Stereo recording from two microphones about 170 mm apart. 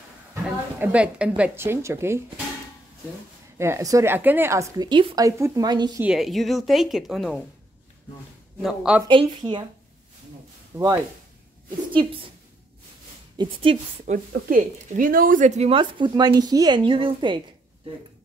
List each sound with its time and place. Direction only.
0.3 s a woman's voice: 10° right (ahead or behind)
3.5 s a woman's voice: 15° right (ahead or behind)
6.0 s speech: centre (ahead or behind)
8.6 s speech: 5° right (ahead or behind)
9.0 s a woman's voice: 25° right (ahead or behind)
10.7 s a woman's voice: 10° right (ahead or behind)
11.9 s a woman's voice: 30° right (ahead or behind)
13.4 s speech: 30° right (ahead or behind)
14.3 s speech: 50° right (ahead or behind); by 17.4 s 30° right (ahead or behind)